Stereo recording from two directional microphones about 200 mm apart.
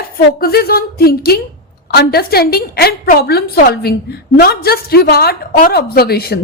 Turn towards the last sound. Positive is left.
turn(degrees=50)  # may be behind; listen again after turning